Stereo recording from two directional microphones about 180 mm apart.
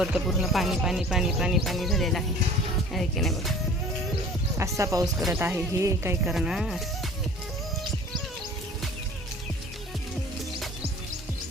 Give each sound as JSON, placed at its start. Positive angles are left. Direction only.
{"t": 0.0, "sound": "speech", "side_deg": 0}
{"t": 4.8, "sound": "speech", "side_deg": -20}
{"t": 6.2, "sound": "speech", "side_deg": 0}